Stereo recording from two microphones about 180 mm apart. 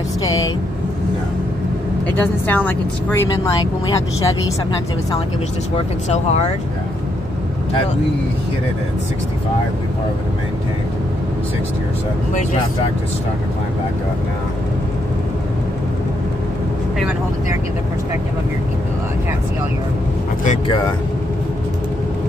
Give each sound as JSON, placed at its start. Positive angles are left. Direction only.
{"t": 2.1, "sound": "speech", "side_deg": 10}
{"t": 6.0, "sound": "speech", "side_deg": 40}